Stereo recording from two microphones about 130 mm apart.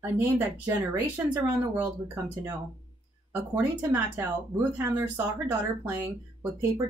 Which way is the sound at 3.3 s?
15° right (ahead or behind).